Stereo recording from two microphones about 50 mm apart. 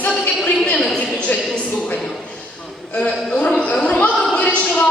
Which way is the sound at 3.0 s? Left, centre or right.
Left.